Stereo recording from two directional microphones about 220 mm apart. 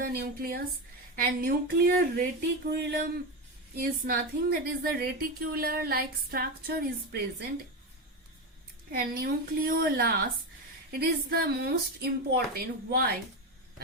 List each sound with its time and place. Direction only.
0.0 s a woman's voice: 45° right (ahead or behind)
8.9 s a woman's voice: 40° right (ahead or behind)